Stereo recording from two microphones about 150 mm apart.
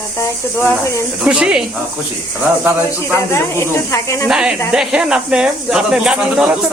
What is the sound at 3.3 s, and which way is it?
Speech, 20° left (ahead or behind).